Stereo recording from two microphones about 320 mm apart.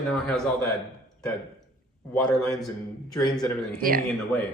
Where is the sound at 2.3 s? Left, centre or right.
Centre.